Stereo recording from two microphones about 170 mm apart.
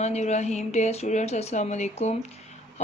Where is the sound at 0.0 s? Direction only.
40° left (ahead or behind).